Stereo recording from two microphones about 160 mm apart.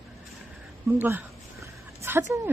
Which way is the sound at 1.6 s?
15° right (ahead or behind).